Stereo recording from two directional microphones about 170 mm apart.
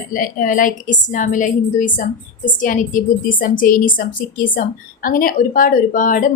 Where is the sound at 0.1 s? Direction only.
55° left (ahead or behind).